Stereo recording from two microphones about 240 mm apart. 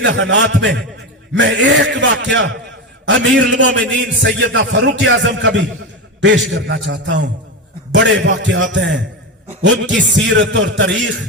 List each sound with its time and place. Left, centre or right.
0.0 s a man's voice: right